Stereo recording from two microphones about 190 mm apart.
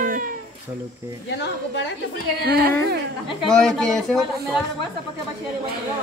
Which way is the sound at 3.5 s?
5° left (ahead or behind).